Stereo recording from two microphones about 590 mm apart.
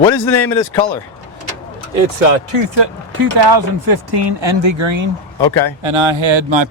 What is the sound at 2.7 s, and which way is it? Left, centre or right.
Speech, right.